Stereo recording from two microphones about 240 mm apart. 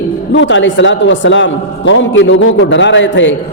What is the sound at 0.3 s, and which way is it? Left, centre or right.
Speech, left.